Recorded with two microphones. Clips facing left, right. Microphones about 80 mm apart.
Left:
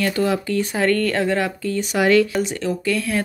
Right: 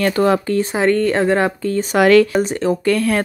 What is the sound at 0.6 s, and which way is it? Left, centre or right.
Speech, right.